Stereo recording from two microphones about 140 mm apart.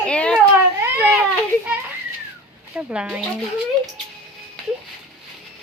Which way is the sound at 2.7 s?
5° right (ahead or behind).